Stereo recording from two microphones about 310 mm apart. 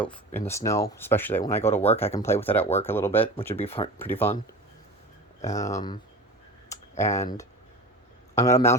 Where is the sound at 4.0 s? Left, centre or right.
Centre.